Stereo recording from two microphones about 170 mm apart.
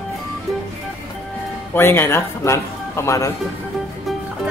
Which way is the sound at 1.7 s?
15° left (ahead or behind).